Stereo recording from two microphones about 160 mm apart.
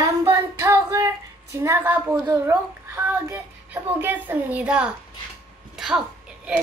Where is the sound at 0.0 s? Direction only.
20° right (ahead or behind).